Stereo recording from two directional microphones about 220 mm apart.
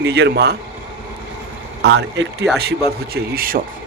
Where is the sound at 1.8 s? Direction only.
50° right (ahead or behind).